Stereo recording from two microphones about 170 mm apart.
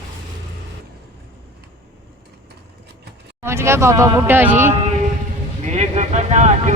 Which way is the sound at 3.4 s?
15° right (ahead or behind).